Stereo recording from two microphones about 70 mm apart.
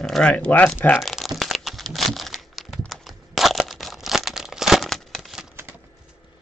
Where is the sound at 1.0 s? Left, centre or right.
Centre.